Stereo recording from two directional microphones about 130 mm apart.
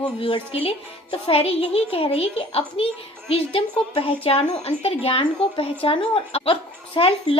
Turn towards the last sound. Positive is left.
turn(degrees=45)  # may be behind; listen again after turning